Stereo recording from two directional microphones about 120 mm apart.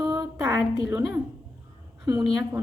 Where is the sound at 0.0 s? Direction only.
30° right (ahead or behind).